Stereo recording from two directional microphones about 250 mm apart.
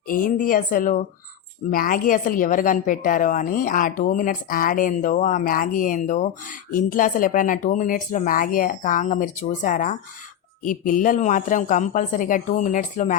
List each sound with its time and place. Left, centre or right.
0.1 s a woman's voice: left